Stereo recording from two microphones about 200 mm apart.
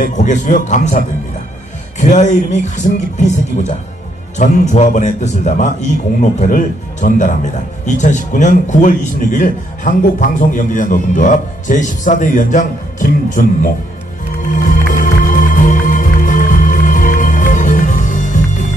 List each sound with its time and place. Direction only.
0.0 s a man's voice: 40° left (ahead or behind)
14.5 s music: 45° left (ahead or behind)